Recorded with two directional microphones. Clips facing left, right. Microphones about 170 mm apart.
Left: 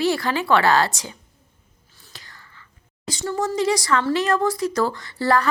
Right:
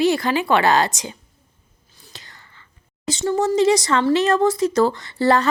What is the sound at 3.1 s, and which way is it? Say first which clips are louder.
Speech: right 5 dB; 25° right (ahead or behind).